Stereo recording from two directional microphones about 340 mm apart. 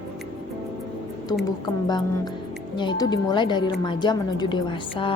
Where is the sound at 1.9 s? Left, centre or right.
Centre.